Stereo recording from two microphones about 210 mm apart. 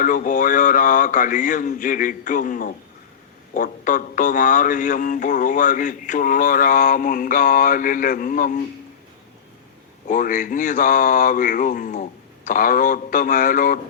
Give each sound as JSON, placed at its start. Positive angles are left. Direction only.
{"t": 0.0, "sound": "a man's voice", "side_deg": 40}
{"t": 10.1, "sound": "a man's voice", "side_deg": 40}